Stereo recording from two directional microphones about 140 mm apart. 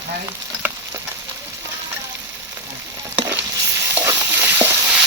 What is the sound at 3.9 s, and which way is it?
Stir, 15° right (ahead or behind).